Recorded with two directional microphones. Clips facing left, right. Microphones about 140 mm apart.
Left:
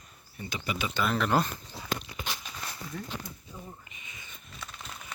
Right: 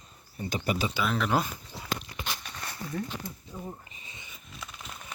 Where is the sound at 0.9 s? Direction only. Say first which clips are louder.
Left 4 dB; centre (ahead or behind).